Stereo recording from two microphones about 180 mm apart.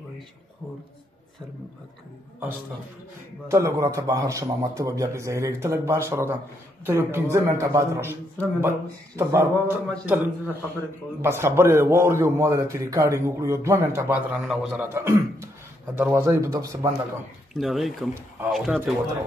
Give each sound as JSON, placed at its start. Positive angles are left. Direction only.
{"t": 3.4, "sound": "a man's voice", "side_deg": -15}
{"t": 15.0, "sound": "a man's voice", "side_deg": -15}
{"t": 17.6, "sound": "speech", "side_deg": 0}